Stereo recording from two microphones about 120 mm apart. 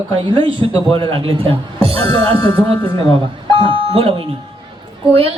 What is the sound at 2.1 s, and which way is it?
Speech, 30° left (ahead or behind).